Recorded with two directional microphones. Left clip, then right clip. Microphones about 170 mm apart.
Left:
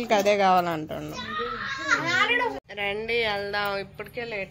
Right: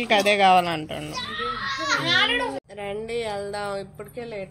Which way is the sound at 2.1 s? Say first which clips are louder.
Right 3 dB; 55° left (ahead or behind).